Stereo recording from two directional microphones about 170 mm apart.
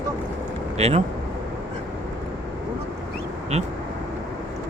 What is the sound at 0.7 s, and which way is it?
Speech, 40° right (ahead or behind).